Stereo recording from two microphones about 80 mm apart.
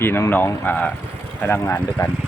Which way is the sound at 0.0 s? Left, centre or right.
Left.